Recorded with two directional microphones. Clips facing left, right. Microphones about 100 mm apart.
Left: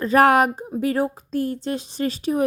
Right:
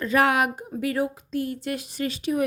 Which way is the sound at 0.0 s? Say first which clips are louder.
Left 6 dB; 40° left (ahead or behind).